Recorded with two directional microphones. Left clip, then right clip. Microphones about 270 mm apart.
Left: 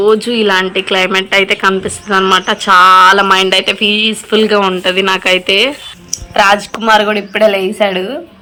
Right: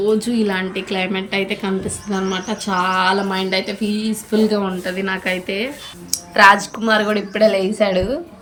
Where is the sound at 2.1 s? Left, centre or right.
Centre.